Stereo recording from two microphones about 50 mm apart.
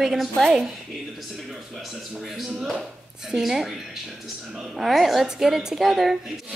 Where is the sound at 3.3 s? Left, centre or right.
Centre.